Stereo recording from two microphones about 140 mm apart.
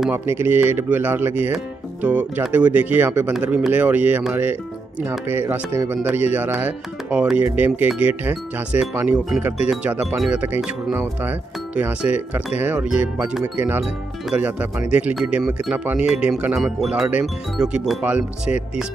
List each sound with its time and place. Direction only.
0.1 s speech: 15° right (ahead or behind)